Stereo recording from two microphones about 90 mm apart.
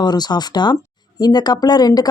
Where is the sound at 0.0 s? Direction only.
50° left (ahead or behind).